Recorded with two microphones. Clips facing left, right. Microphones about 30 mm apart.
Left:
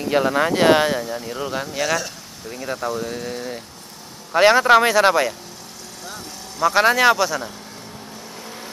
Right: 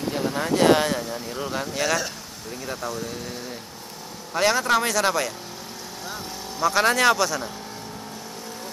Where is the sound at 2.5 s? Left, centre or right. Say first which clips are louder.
Left 5 dB; centre.